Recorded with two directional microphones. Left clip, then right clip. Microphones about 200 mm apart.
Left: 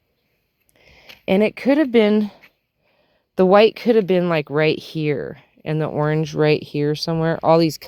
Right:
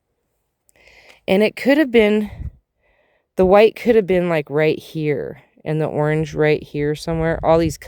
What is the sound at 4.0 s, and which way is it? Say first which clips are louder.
Speech: right 1 dB; 30° right (ahead or behind).